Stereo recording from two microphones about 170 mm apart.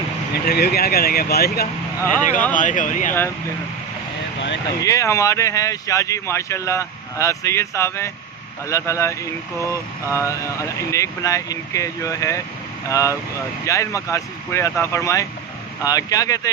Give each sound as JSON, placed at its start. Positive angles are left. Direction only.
{"t": 0.4, "sound": "speech", "side_deg": 65}
{"t": 2.5, "sound": "speech", "side_deg": 50}
{"t": 3.1, "sound": "speech", "side_deg": 15}
{"t": 4.4, "sound": "a sound", "side_deg": 90}
{"t": 4.8, "sound": "speech", "side_deg": 20}